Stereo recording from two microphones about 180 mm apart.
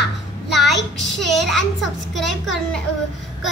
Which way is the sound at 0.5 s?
Centre (ahead or behind).